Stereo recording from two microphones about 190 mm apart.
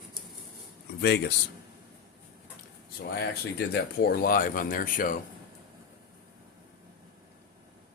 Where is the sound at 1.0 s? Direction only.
60° left (ahead or behind).